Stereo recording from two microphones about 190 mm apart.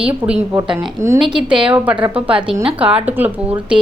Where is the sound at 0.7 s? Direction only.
15° right (ahead or behind).